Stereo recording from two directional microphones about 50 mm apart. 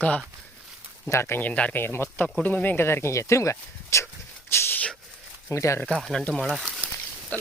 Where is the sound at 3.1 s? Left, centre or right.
Left.